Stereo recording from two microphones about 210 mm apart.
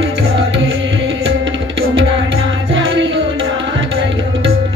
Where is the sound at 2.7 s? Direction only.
70° right (ahead or behind).